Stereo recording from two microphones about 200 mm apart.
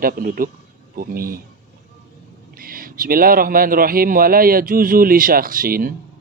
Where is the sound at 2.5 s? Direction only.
45° right (ahead or behind).